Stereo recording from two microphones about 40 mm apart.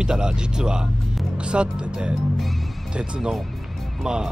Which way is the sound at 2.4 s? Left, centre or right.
Centre.